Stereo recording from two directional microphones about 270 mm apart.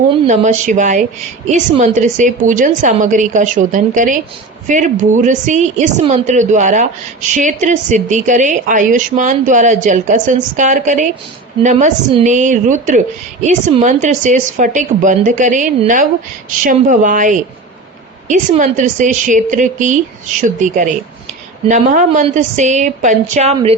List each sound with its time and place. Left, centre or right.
0.3 s a woman's voice: right